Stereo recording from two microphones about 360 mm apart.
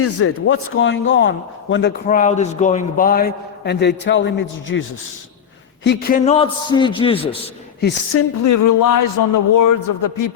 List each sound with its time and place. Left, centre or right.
0.0 s a man's voice: left
5.8 s a man's voice: left
7.8 s a man's voice: left
8.4 s a man's voice: left